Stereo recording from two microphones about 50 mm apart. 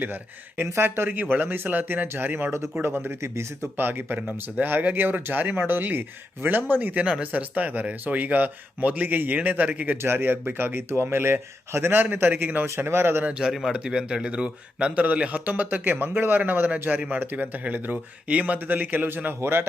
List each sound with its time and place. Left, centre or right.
0.0 s speech: right
6.9 s speech: right
10.0 s speech: right
13.4 s speech: centre; by 19.0 s right
19.0 s speech: right